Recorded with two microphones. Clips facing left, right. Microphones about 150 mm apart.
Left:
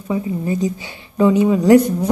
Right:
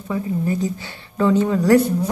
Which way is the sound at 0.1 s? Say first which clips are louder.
Left 2 dB; 15° left (ahead or behind).